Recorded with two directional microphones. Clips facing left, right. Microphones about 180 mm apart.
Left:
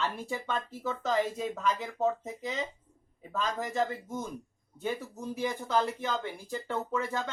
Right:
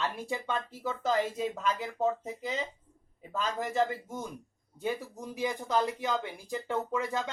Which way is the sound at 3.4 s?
Centre (ahead or behind).